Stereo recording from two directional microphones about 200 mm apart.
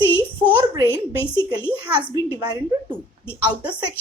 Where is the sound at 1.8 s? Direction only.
10° right (ahead or behind).